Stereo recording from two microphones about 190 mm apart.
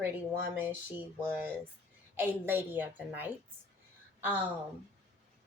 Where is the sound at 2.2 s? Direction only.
10° right (ahead or behind).